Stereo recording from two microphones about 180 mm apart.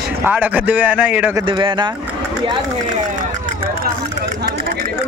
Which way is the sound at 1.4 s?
25° right (ahead or behind).